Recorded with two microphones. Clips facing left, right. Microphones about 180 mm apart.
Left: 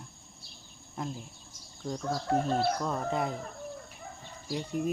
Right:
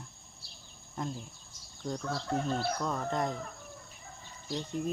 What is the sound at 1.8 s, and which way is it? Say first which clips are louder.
Fowl: even; 25° left (ahead or behind).